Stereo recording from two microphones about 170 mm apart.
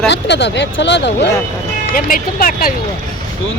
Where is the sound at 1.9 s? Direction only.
55° left (ahead or behind).